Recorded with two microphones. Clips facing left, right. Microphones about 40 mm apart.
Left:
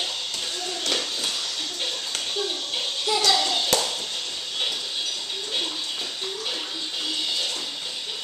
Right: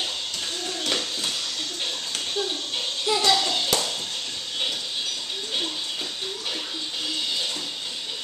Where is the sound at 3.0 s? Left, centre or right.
Right.